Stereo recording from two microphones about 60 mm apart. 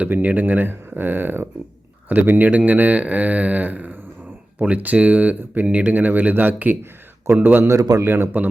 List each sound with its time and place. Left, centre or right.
0.1 s speech: right
7.7 s a man's voice: right
8.0 s speech: right